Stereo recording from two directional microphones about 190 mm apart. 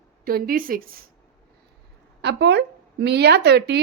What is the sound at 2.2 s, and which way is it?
A woman's voice, 60° right (ahead or behind).